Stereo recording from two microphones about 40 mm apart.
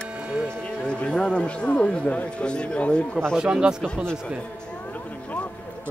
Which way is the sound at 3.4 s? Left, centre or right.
Right.